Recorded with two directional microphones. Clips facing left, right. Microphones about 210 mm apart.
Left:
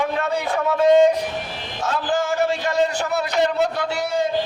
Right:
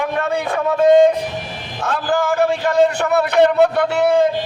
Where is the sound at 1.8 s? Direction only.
60° right (ahead or behind).